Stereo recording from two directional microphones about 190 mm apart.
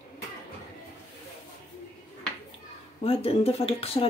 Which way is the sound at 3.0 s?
30° left (ahead or behind).